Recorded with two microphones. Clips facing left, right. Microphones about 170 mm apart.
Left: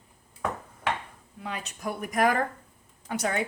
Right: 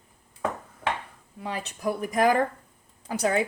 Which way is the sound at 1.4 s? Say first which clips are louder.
Right 4 dB; 35° right (ahead or behind).